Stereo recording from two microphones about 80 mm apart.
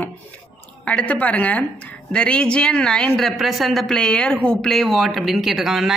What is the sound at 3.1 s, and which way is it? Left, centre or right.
Speech, centre.